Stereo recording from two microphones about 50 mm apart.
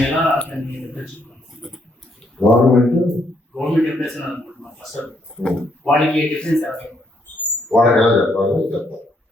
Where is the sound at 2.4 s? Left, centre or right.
Centre.